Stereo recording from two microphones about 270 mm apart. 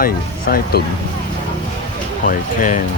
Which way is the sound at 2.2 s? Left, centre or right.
Left.